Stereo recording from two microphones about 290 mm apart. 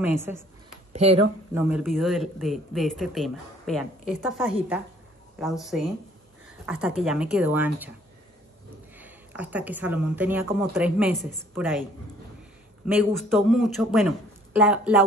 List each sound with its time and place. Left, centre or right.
0.9 s speech: right
1.5 s speech: centre
8.9 s speech: centre
12.8 s speech: centre